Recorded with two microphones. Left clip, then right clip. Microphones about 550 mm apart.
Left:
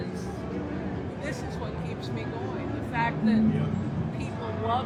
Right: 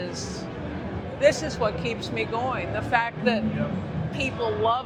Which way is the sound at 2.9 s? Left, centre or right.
Right.